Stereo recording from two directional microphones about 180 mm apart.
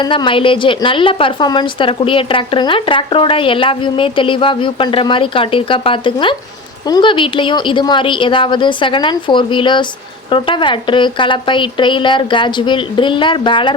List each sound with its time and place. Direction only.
0.0 s a woman's voice: 25° left (ahead or behind)